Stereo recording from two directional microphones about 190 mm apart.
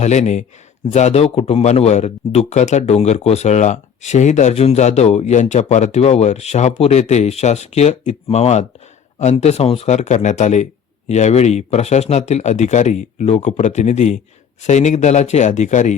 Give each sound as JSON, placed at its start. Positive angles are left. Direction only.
{"t": 0.0, "sound": "a man's voice", "side_deg": 35}